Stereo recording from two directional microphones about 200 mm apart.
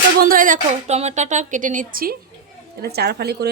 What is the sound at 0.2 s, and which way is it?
Speech, 45° right (ahead or behind).